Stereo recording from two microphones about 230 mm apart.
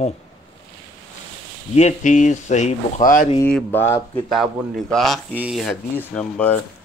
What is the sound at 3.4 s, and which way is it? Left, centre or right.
Speech, centre.